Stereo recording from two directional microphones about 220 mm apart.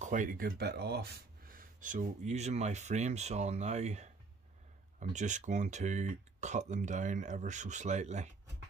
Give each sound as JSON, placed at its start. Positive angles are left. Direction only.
{"t": 0.0, "sound": "speech", "side_deg": -35}
{"t": 1.5, "sound": "speech", "side_deg": -35}